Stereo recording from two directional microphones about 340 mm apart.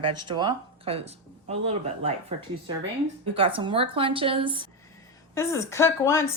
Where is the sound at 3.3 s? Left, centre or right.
Centre.